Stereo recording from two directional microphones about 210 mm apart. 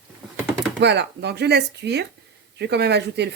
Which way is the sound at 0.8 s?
55° right (ahead or behind).